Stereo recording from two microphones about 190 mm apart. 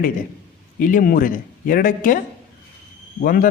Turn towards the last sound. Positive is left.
turn(degrees=50)  # may be behind; listen again after turning